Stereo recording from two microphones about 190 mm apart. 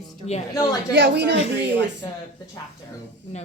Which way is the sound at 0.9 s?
65° right (ahead or behind).